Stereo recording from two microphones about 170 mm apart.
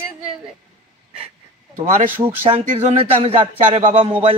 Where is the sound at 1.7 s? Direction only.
50° right (ahead or behind).